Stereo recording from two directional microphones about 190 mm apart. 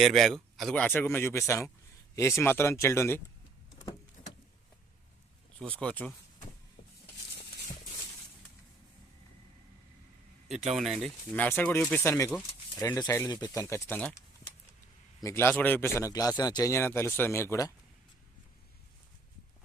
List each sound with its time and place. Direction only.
0.0 s a man's voice: centre (ahead or behind)
5.5 s a man's voice: 5° left (ahead or behind)
10.8 s a man's voice: centre (ahead or behind)
15.2 s a man's voice: 10° left (ahead or behind)